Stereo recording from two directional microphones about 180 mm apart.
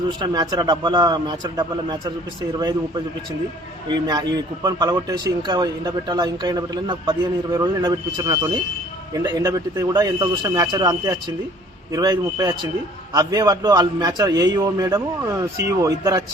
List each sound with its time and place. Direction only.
0.2 s speech: 25° right (ahead or behind)
3.8 s speech: 25° right (ahead or behind)